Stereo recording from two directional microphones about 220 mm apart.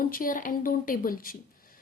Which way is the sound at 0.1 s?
40° left (ahead or behind).